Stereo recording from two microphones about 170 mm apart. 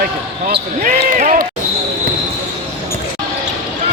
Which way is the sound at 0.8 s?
50° right (ahead or behind).